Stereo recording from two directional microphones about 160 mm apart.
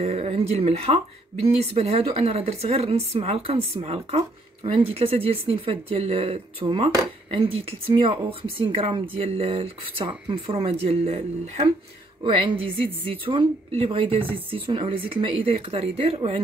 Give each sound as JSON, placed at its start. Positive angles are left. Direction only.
{"t": 0.0, "sound": "speech", "side_deg": -40}
{"t": 8.0, "sound": "speech", "side_deg": -35}